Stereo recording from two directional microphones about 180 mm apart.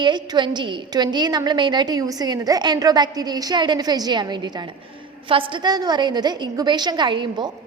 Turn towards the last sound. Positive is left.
turn(degrees=-25)  # may be behind; listen again after turning